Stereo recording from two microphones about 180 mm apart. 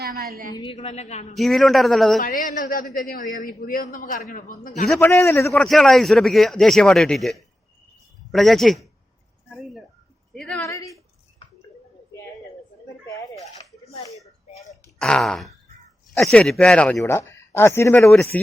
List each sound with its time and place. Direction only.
0.0 s a sound: 55° right (ahead or behind)
0.5 s a woman's voice: 30° left (ahead or behind)
1.4 s speech: centre (ahead or behind)
2.2 s a man's voice: 50° left (ahead or behind)
4.9 s a man's voice: 10° left (ahead or behind)
5.5 s speech: centre (ahead or behind)
10.3 s a woman's voice: 5° left (ahead or behind)
10.6 s a man's voice: 15° left (ahead or behind)
14.9 s a sound: 5° left (ahead or behind)
16.1 s a man's voice: 5° left (ahead or behind)